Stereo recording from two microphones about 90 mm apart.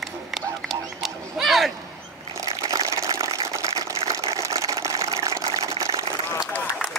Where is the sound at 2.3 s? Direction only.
40° right (ahead or behind).